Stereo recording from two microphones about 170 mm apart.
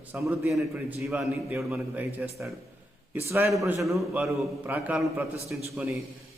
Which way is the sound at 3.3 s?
15° right (ahead or behind).